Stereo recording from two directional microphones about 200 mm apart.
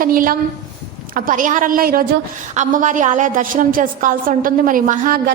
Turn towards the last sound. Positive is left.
turn(degrees=-45)  # may be behind; listen again after turning